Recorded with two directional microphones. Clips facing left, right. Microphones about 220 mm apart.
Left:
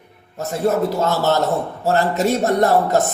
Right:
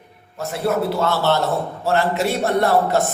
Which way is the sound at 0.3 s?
40° left (ahead or behind).